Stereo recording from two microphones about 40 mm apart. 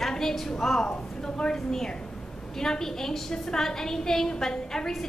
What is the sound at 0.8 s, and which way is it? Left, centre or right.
A woman's voice, left.